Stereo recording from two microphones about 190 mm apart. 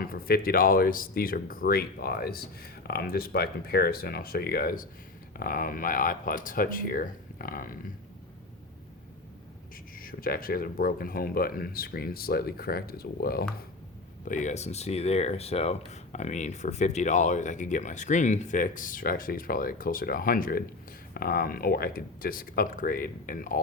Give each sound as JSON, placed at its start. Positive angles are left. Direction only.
{"t": 0.0, "sound": "speech", "side_deg": 50}
{"t": 10.0, "sound": "speech", "side_deg": 50}
{"t": 14.3, "sound": "speech", "side_deg": 40}